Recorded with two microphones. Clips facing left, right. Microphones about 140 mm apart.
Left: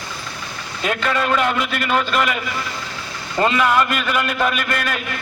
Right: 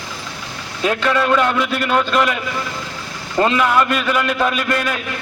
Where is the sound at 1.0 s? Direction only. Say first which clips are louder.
Right 3 dB; centre (ahead or behind).